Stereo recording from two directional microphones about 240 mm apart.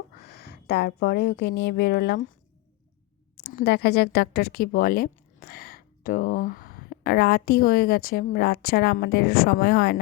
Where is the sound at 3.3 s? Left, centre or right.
Left.